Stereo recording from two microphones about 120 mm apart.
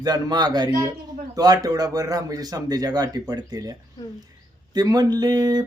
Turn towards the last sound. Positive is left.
turn(degrees=-35)  # may be behind; listen again after turning